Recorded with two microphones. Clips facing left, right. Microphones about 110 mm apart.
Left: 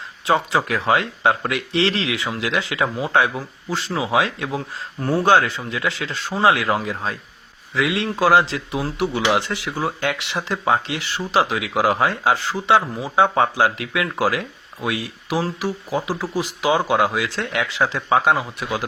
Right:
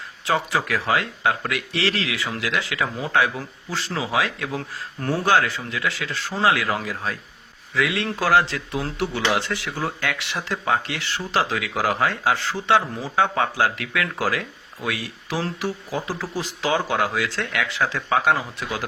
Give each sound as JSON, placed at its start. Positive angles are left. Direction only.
{"t": 0.3, "sound": "speech", "side_deg": 20}